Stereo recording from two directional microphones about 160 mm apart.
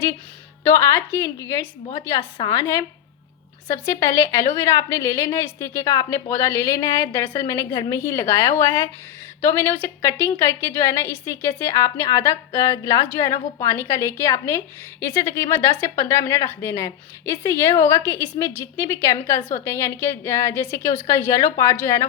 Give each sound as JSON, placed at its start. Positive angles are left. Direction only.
{"t": 0.6, "sound": "a woman's voice", "side_deg": 15}